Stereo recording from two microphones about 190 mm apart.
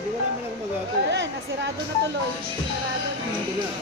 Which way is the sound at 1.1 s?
70° right (ahead or behind).